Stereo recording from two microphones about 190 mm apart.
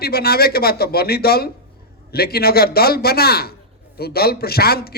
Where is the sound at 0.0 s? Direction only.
55° left (ahead or behind).